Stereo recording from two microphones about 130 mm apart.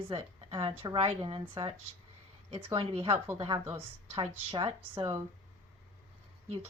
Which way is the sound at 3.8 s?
45° right (ahead or behind).